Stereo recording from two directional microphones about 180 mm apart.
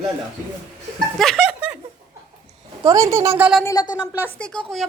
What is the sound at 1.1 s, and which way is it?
Chuckle, centre (ahead or behind).